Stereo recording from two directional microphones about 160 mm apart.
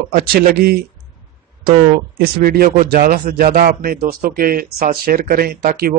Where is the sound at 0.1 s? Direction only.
75° right (ahead or behind).